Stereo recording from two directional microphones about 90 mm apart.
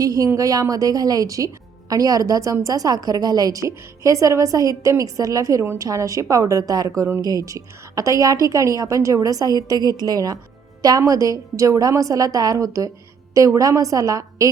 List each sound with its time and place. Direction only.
0.0 s a woman's voice: 40° right (ahead or behind)